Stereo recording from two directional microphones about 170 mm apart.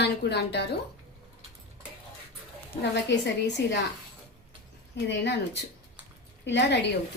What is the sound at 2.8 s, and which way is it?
A woman's voice, 90° left.